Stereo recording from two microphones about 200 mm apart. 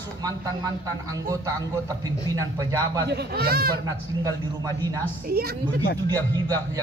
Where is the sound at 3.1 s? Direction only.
50° right (ahead or behind).